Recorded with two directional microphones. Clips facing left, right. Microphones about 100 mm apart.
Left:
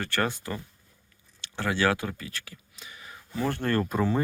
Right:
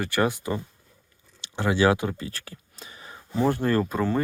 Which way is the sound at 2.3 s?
35° right (ahead or behind).